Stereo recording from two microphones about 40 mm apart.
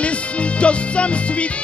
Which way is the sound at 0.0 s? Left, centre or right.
Left.